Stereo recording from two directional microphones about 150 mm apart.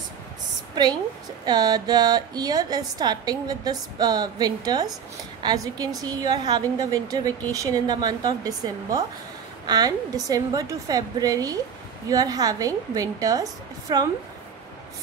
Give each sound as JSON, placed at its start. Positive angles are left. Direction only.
{"t": 1.4, "sound": "a woman's voice", "side_deg": -25}